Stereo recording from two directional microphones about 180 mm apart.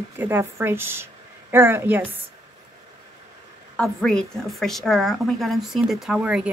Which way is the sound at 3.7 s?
5° left (ahead or behind).